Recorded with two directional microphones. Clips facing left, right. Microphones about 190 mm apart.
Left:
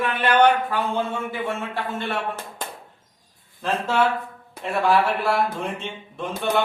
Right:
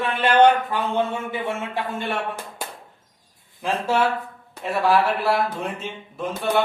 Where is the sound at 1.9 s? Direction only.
15° right (ahead or behind).